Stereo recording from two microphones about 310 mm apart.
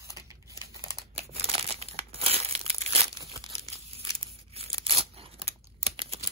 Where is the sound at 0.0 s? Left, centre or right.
Centre.